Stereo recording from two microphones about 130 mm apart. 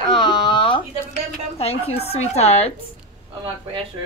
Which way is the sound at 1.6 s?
50° left (ahead or behind).